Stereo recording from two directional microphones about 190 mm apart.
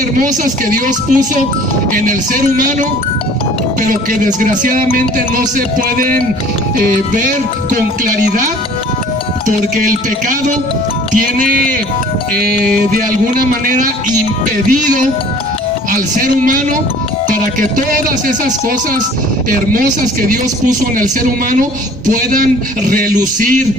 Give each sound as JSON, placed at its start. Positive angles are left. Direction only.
{"t": 0.2, "sound": "a man's voice", "side_deg": -45}
{"t": 9.5, "sound": "a man's voice", "side_deg": -45}
{"t": 12.7, "sound": "a man's voice", "side_deg": -50}